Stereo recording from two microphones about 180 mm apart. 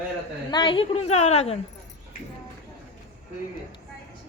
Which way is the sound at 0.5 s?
25° left (ahead or behind).